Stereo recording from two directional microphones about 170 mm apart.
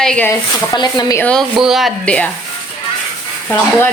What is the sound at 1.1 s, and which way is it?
Speech, 10° left (ahead or behind).